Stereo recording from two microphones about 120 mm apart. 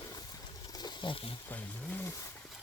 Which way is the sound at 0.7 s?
35° left (ahead or behind).